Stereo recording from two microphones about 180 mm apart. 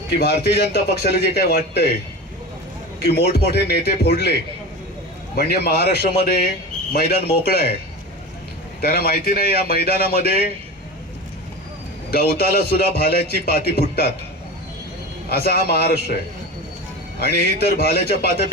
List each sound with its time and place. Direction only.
0.1 s a man's voice: 65° left (ahead or behind)
3.0 s a man's voice: 65° left (ahead or behind)
5.4 s a man's voice: 60° left (ahead or behind)
8.8 s a man's voice: 60° left (ahead or behind)
12.1 s a man's voice: 60° left (ahead or behind)
15.3 s a man's voice: 60° left (ahead or behind)
17.2 s a man's voice: 60° left (ahead or behind)